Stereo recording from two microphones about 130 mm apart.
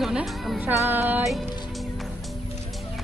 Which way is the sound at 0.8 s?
15° right (ahead or behind).